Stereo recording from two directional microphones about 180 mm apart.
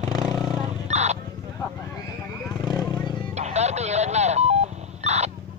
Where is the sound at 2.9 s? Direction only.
25° left (ahead or behind).